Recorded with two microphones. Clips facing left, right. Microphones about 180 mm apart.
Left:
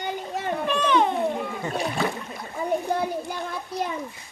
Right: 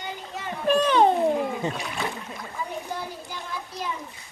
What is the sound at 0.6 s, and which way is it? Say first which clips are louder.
Speech: right 4 dB; 35° right (ahead or behind).